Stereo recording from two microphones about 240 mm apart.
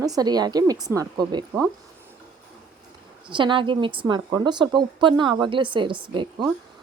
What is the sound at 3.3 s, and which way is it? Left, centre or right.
A woman's voice, centre.